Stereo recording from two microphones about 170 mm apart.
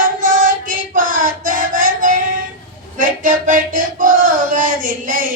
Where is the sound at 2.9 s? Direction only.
50° right (ahead or behind).